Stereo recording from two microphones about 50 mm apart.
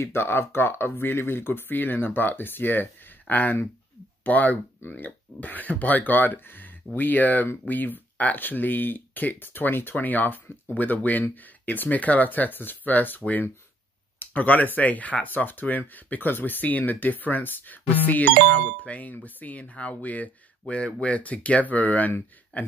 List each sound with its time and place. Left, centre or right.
0.0 s speech: left